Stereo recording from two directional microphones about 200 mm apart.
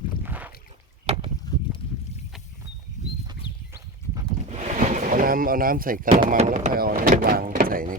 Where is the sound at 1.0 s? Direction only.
30° right (ahead or behind).